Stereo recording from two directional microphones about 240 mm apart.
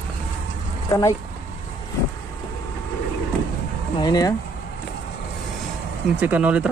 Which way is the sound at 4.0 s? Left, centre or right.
Centre.